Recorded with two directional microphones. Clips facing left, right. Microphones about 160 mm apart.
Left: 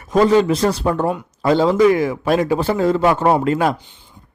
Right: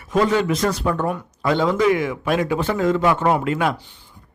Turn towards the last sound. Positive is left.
turn(degrees=35)  # may be behind; listen again after turning